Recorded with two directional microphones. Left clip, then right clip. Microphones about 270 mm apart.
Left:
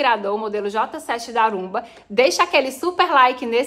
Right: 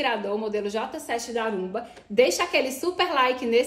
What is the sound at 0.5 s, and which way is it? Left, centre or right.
Speech, centre.